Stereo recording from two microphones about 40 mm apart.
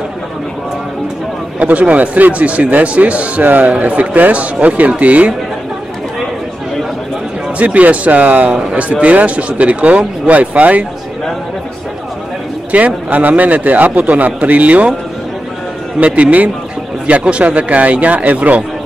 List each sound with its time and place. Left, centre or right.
1.6 s speech: right
7.5 s speech: right
12.7 s speech: right
16.0 s speech: right